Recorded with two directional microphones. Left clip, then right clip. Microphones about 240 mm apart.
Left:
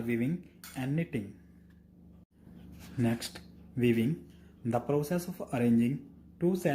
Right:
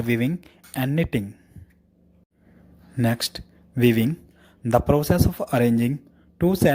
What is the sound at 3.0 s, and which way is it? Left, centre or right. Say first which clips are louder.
A man's voice: right 9 dB; right.